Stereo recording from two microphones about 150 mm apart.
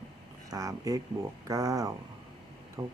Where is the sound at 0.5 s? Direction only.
25° right (ahead or behind).